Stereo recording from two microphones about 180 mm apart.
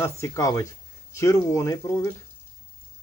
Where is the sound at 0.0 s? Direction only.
15° left (ahead or behind).